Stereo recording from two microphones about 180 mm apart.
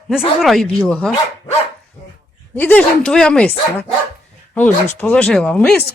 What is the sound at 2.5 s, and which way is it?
Speech, 10° left (ahead or behind).